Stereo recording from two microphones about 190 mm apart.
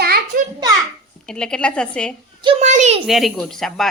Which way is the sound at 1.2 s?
5° left (ahead or behind).